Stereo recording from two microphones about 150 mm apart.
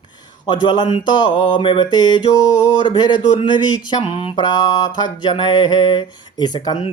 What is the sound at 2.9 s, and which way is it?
Mantra, 30° left (ahead or behind).